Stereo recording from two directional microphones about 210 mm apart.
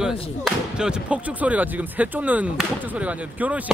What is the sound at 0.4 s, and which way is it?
Speech, centre (ahead or behind).